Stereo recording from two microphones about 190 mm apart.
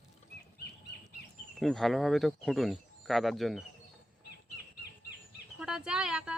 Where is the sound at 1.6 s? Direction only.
Centre (ahead or behind).